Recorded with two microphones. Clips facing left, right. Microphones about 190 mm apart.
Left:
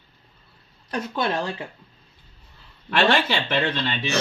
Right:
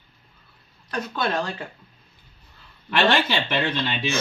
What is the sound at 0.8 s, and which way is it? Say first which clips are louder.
Speech: left 1 dB; 25° left (ahead or behind).